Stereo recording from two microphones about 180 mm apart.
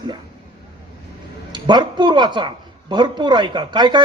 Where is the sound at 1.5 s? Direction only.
25° right (ahead or behind).